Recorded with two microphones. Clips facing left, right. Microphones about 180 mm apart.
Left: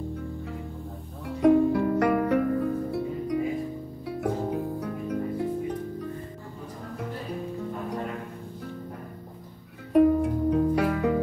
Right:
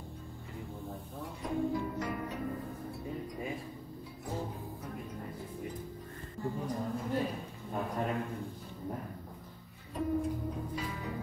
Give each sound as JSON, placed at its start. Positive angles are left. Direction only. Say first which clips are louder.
{"t": 1.2, "sound": "music", "louder": "left 15 dB", "side_deg": 70}
{"t": 9.9, "sound": "music", "louder": "left 13 dB", "side_deg": 70}